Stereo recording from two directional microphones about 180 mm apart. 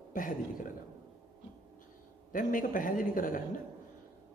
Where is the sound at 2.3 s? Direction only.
50° left (ahead or behind).